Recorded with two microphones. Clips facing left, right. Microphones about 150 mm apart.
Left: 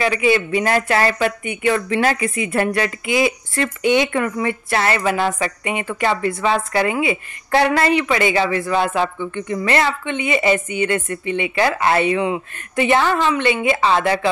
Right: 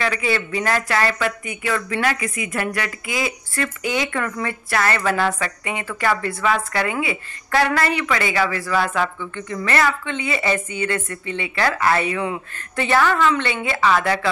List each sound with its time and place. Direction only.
0.0 s speech: 20° left (ahead or behind)